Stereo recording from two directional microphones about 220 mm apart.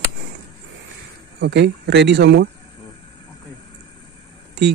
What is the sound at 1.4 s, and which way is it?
Speech, 50° right (ahead or behind).